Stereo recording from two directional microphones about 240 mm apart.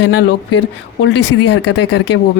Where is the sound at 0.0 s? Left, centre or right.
Left.